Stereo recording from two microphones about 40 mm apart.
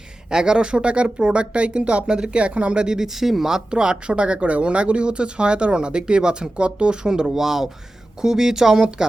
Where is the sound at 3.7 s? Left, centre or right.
Right.